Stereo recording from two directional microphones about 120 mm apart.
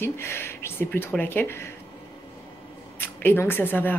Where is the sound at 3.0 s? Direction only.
20° left (ahead or behind).